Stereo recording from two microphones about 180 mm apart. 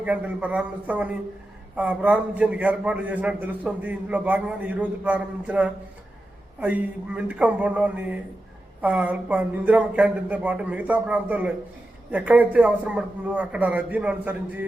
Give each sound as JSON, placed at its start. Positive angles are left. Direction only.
{"t": 0.0, "sound": "a man's voice", "side_deg": -10}